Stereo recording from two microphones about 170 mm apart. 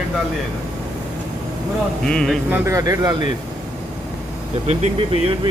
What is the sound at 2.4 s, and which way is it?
Speech, 15° right (ahead or behind).